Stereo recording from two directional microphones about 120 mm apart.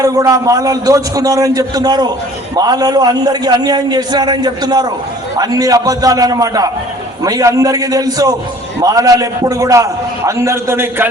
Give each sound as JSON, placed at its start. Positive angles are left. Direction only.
{"t": 0.0, "sound": "a man's voice", "side_deg": -30}